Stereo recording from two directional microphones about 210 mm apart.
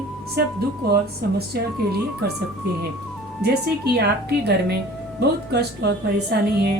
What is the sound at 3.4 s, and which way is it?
Speech, 50° right (ahead or behind).